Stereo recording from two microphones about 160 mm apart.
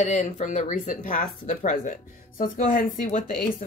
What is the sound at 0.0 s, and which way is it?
Speech, 50° left (ahead or behind).